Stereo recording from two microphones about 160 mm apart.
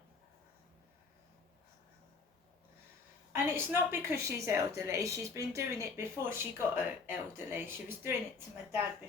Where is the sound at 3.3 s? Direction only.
15° right (ahead or behind).